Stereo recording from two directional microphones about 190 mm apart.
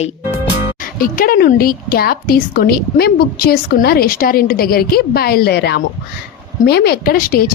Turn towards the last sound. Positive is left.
turn(degrees=50)  # may be behind; listen again after turning